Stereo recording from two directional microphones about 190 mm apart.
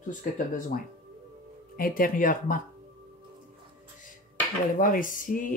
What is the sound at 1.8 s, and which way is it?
Speech, 50° left (ahead or behind).